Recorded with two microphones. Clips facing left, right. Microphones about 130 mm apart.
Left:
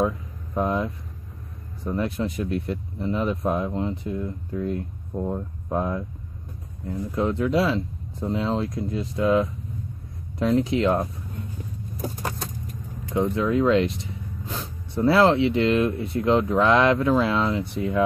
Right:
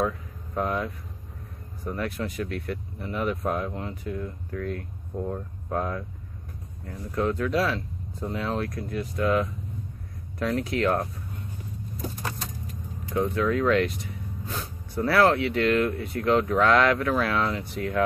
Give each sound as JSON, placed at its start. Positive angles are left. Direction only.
{"t": 0.6, "sound": "speech", "side_deg": 20}
{"t": 13.1, "sound": "speech", "side_deg": 20}
{"t": 15.0, "sound": "speech", "side_deg": 20}